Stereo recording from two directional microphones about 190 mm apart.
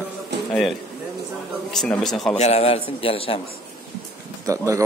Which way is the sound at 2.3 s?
35° left (ahead or behind).